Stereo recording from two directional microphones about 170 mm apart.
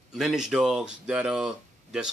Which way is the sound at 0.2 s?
5° right (ahead or behind).